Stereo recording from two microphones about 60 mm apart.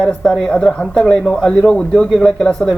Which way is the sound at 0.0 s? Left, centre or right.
Centre.